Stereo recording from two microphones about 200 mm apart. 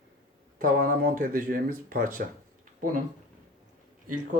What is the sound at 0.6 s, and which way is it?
Speech, 45° right (ahead or behind).